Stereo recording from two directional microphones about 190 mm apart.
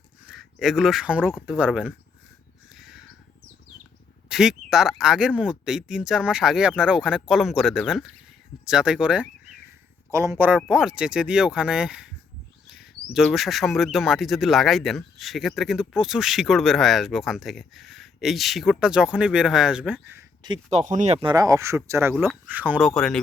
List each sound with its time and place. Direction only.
0.3 s speech: centre (ahead or behind)
2.7 s crow: centre (ahead or behind)
4.3 s speech: 5° right (ahead or behind)
20.7 s speech: 40° right (ahead or behind); by 22.9 s 10° right (ahead or behind)
23.0 s speech: 5° left (ahead or behind)